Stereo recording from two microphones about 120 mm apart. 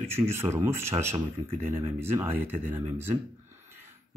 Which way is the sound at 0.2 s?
20° right (ahead or behind).